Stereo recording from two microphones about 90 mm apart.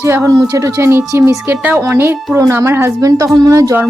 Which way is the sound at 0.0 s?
35° right (ahead or behind).